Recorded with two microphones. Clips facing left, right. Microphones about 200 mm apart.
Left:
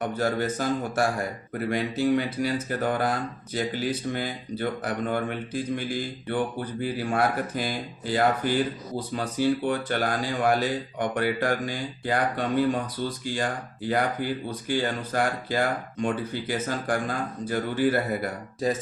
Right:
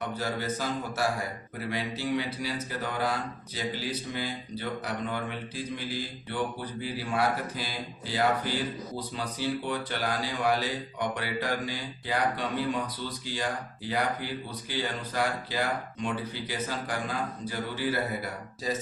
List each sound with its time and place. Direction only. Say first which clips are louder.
0.0 s speech: left 6 dB; 50° left (ahead or behind)